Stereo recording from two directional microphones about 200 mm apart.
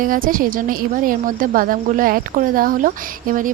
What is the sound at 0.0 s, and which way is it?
A woman's voice, 45° right (ahead or behind).